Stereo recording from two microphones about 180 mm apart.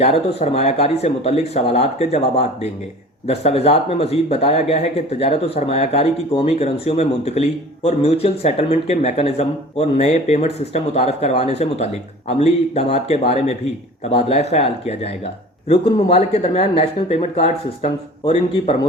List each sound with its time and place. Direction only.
0.0 s speech: 35° left (ahead or behind)